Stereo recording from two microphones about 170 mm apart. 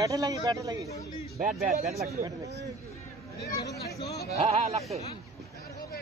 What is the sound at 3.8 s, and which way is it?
Speech, 20° left (ahead or behind).